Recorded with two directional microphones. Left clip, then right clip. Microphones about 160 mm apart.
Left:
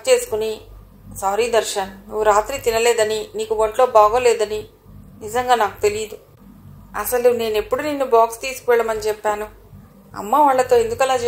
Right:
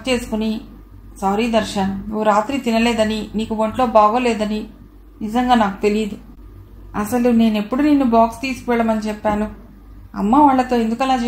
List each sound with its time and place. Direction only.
0.0 s a woman's voice: 40° left (ahead or behind)